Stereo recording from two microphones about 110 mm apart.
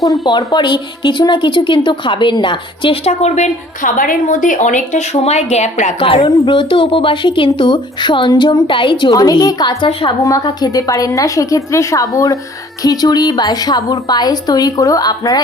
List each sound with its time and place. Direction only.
0.3 s a woman's voice: 45° left (ahead or behind)
3.0 s speech: 80° left
4.6 s speech: 90° left
6.0 s a woman's voice: 55° left (ahead or behind); by 15.4 s 35° left (ahead or behind)